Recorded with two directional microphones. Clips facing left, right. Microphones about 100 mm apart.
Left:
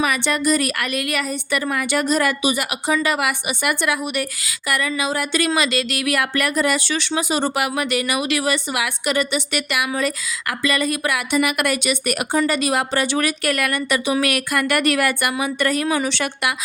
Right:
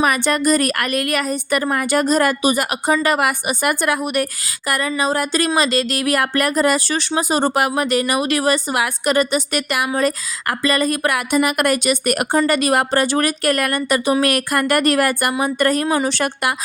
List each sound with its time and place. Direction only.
0.0 s speech: 45° right (ahead or behind)